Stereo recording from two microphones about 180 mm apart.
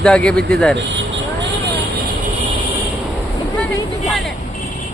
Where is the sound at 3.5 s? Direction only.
5° left (ahead or behind).